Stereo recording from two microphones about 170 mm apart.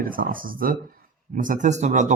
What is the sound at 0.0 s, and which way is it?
Speech, 55° right (ahead or behind).